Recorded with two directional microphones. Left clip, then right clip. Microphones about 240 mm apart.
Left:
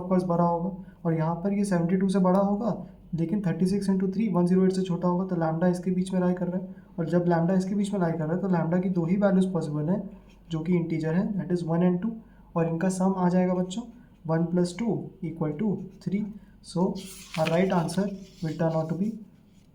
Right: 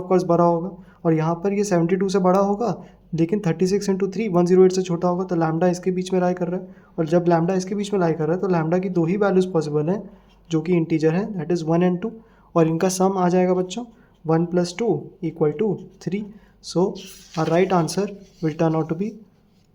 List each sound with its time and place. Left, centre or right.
0.1 s speech: right
17.5 s speech: right